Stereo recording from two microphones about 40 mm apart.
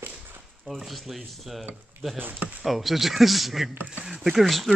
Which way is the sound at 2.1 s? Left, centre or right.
Right.